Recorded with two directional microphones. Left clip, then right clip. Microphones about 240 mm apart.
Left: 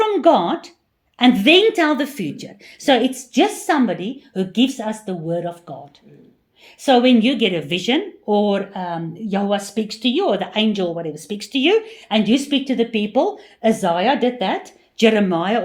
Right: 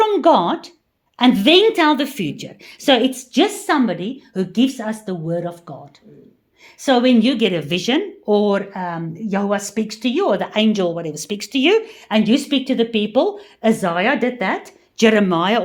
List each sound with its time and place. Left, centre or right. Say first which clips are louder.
0.0 s a woman's voice: right 1 dB; centre
6.8 s speech: left 1 dB; centre